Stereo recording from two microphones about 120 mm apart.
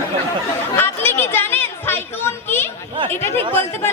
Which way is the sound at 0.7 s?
20° left (ahead or behind).